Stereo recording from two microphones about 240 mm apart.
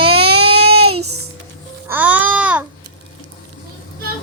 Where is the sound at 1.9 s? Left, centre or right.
Centre.